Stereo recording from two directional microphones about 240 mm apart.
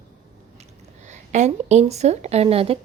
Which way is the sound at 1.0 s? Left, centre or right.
Right.